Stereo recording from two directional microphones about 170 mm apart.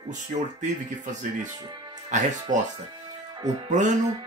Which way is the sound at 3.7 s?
45° right (ahead or behind).